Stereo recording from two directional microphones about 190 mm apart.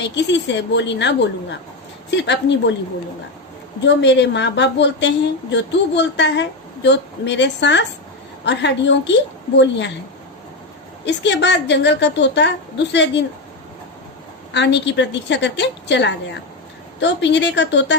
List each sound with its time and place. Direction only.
0.0 s a woman's voice: 65° left (ahead or behind)
3.8 s a woman's voice: 65° left (ahead or behind)
11.0 s a woman's voice: 70° left (ahead or behind)
14.5 s a woman's voice: 70° left (ahead or behind)